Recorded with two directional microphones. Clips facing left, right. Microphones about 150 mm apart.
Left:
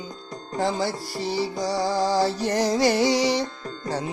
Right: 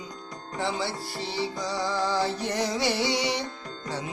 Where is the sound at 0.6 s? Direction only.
40° left (ahead or behind).